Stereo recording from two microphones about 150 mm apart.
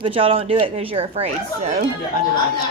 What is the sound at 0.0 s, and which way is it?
Speech, 40° right (ahead or behind).